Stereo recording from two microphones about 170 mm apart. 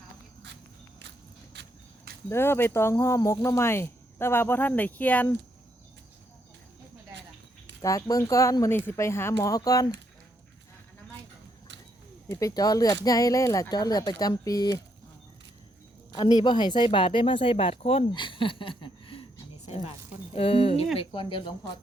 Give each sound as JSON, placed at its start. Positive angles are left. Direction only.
{"t": 2.3, "sound": "speech", "side_deg": 15}
{"t": 7.8, "sound": "speech", "side_deg": 20}
{"t": 12.3, "sound": "speech", "side_deg": 20}
{"t": 16.1, "sound": "speech", "side_deg": 25}